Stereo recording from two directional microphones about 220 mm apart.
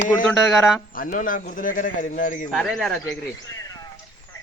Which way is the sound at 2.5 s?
Centre (ahead or behind).